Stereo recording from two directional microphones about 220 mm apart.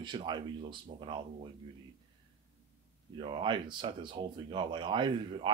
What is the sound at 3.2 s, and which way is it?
Speech, 25° right (ahead or behind).